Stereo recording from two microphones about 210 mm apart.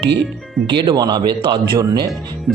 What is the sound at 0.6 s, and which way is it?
Speech, 20° right (ahead or behind).